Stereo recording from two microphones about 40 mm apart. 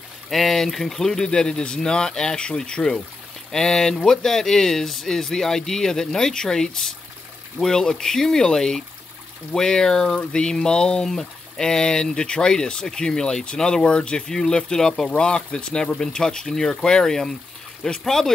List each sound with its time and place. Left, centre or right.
0.3 s speech: centre; by 14.2 s left
14.2 s speech: centre